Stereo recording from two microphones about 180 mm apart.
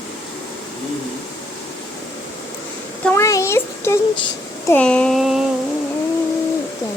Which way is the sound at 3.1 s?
15° left (ahead or behind).